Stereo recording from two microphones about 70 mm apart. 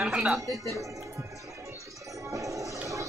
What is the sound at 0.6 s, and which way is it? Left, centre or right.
Music, right.